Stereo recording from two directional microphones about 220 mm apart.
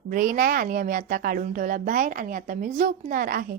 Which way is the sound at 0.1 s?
40° right (ahead or behind).